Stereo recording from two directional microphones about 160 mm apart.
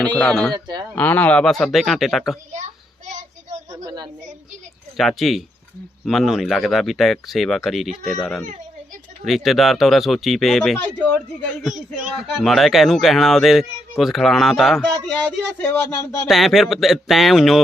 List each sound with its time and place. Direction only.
0.0 s speech: 5° left (ahead or behind)
0.5 s speech: 25° right (ahead or behind)
0.9 s speech: 10° left (ahead or behind)
3.8 s speech: 25° right (ahead or behind)
4.9 s speech: centre (ahead or behind)
15.1 s speech: 10° left (ahead or behind)
16.2 s speech: centre (ahead or behind)